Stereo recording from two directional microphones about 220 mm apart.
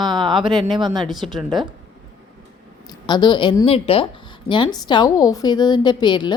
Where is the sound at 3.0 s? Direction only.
20° left (ahead or behind).